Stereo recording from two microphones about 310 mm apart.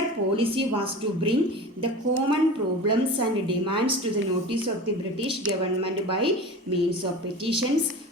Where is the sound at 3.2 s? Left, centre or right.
Centre.